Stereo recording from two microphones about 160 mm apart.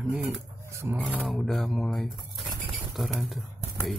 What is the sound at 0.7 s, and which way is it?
Speech, 15° right (ahead or behind).